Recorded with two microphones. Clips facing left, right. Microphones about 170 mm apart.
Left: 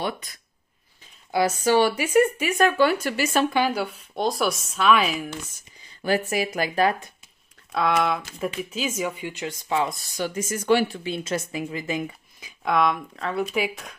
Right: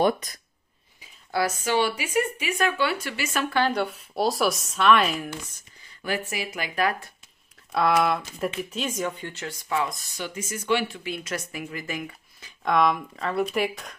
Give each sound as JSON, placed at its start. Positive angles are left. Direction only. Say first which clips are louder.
{"t": 0.0, "sound": "speech", "louder": "right 7 dB", "side_deg": -45}
{"t": 1.6, "sound": "speech", "louder": "left 5 dB", "side_deg": 40}
{"t": 3.4, "sound": "speech", "louder": "left 1 dB", "side_deg": 10}
{"t": 6.0, "sound": "speech", "louder": "left 6 dB", "side_deg": 40}
{"t": 7.7, "sound": "speech", "louder": "right 1 dB", "side_deg": 0}
{"t": 10.1, "sound": "speech", "louder": "left 6 dB", "side_deg": 40}
{"t": 11.1, "sound": "speech", "louder": "left 4 dB", "side_deg": 25}
{"t": 12.6, "sound": "speech", "louder": "even", "side_deg": 0}